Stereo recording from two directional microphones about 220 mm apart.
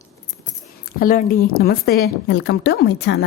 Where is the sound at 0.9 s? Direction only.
40° left (ahead or behind).